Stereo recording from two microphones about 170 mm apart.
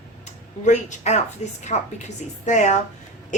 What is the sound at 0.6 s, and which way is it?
A woman's voice, 45° left (ahead or behind).